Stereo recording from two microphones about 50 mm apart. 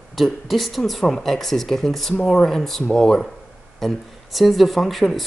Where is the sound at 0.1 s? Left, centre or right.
Centre.